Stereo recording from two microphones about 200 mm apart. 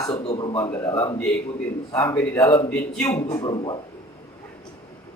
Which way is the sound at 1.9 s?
15° left (ahead or behind).